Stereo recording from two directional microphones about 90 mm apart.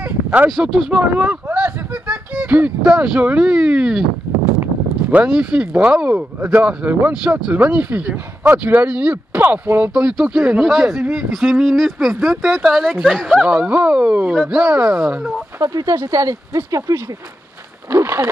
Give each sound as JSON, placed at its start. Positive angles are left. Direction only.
{"t": 0.0, "sound": "a sound", "side_deg": -15}
{"t": 0.5, "sound": "speech", "side_deg": -5}
{"t": 5.1, "sound": "speech", "side_deg": -10}
{"t": 13.6, "sound": "speech", "side_deg": -10}
{"t": 15.6, "sound": "speech", "side_deg": -40}
{"t": 17.9, "sound": "speech", "side_deg": -20}